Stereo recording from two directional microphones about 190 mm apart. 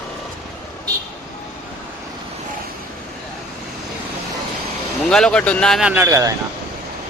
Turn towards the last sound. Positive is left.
turn(degrees=-15)  # may be behind; listen again after turning